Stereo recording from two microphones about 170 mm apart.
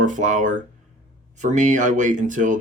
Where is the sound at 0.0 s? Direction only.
50° right (ahead or behind).